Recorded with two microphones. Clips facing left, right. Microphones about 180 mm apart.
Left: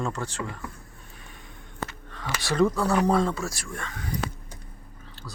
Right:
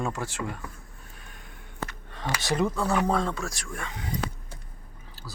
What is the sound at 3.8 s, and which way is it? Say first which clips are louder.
Speech: even; 20° right (ahead or behind).